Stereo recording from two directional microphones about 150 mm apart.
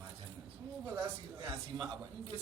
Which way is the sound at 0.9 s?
20° right (ahead or behind).